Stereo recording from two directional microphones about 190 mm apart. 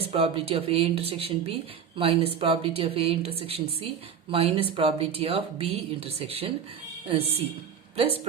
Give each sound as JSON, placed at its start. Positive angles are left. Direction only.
{"t": 0.0, "sound": "speech", "side_deg": -30}